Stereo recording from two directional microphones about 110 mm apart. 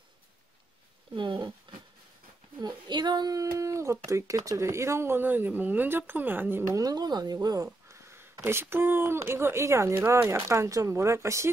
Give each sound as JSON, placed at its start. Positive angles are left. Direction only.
{"t": 1.1, "sound": "speech", "side_deg": -45}
{"t": 2.6, "sound": "speech", "side_deg": -40}
{"t": 6.8, "sound": "speech", "side_deg": -35}